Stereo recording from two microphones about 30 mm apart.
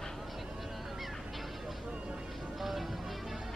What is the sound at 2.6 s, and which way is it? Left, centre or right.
Music, centre.